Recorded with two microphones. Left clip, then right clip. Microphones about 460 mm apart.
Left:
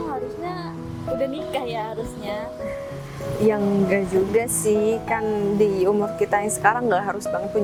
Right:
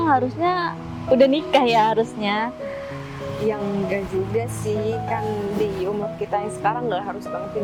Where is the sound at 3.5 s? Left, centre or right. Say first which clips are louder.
Left 4 dB; left.